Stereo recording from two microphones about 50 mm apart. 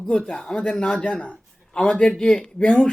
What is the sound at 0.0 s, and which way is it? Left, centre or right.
Speech, centre.